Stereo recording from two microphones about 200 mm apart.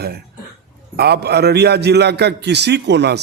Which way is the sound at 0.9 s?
55° right (ahead or behind).